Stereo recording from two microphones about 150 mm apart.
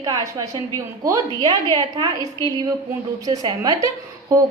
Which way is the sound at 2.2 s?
25° left (ahead or behind).